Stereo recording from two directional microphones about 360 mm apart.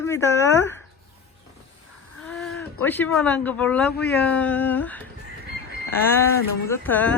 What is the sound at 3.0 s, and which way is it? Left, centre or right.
Speech, centre.